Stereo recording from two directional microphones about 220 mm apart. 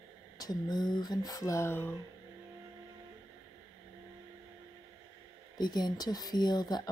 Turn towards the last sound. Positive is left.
turn(degrees=20)  # may be behind; listen again after turning